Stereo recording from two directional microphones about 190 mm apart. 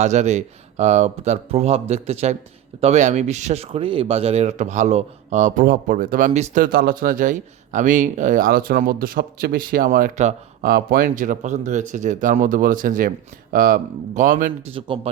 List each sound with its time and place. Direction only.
0.0 s speech: 35° right (ahead or behind)
14.7 s speech: 30° right (ahead or behind)